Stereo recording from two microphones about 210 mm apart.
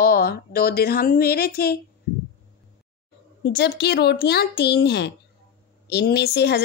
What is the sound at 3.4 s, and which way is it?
A woman's voice, 50° left (ahead or behind).